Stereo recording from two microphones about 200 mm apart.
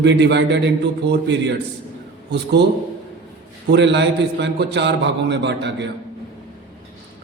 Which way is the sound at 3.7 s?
60° right (ahead or behind).